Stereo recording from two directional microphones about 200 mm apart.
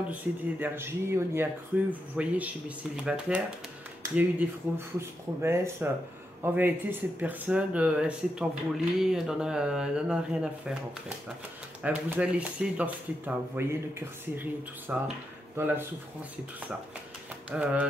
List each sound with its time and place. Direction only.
0.1 s speech: 10° right (ahead or behind)
17.5 s speech: 5° right (ahead or behind)